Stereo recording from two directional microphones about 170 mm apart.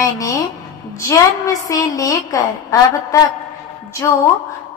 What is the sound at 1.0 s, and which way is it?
A woman's voice, 20° left (ahead or behind).